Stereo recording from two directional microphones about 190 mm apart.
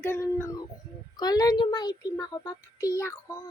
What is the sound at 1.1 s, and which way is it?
A child's voice, 20° left (ahead or behind).